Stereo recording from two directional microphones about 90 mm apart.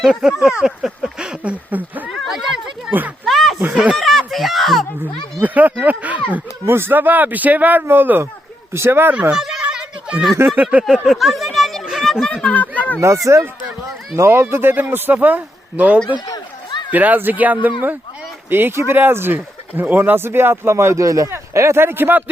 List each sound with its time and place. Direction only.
0.0 s speech: 5° right (ahead or behind)
2.0 s speech: centre (ahead or behind)
2.9 s speech: 20° right (ahead or behind)
3.2 s a sound: centre (ahead or behind)
3.9 s speech: centre (ahead or behind)
5.4 s speech: 20° right (ahead or behind)
9.3 s a sound: 5° right (ahead or behind)
10.5 s speech: 15° right (ahead or behind)
10.8 s speech: 5° right (ahead or behind); by 13.0 s 15° left (ahead or behind)
13.2 s speech: 35° right (ahead or behind)